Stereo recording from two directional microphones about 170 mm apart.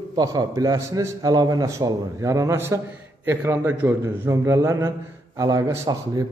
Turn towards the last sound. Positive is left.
turn(degrees=-20)  # may be behind; listen again after turning